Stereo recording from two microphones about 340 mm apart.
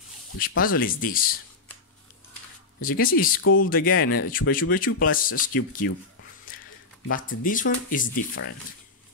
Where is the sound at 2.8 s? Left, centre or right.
Left.